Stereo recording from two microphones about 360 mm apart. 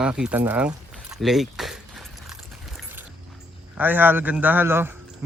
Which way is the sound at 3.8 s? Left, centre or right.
Centre.